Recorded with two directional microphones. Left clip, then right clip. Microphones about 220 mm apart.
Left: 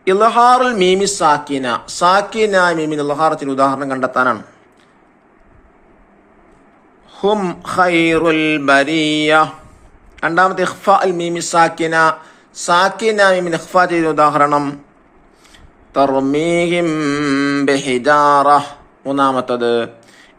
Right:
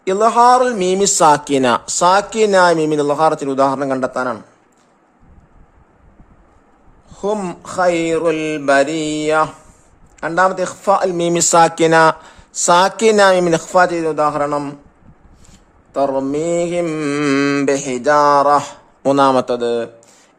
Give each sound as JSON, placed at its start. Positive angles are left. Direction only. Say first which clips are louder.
{"t": 0.0, "sound": "a man's voice", "louder": "left 1 dB", "side_deg": -25}
{"t": 7.1, "sound": "speech", "louder": "left 4 dB", "side_deg": -20}
{"t": 11.1, "sound": "a man's voice", "louder": "right 3 dB", "side_deg": -40}
{"t": 15.9, "sound": "speech", "louder": "left 3 dB", "side_deg": -20}
{"t": 17.7, "sound": "speech", "louder": "left 2 dB", "side_deg": -20}